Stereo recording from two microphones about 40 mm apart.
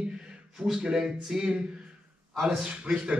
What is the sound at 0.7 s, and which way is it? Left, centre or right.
A man's voice, centre.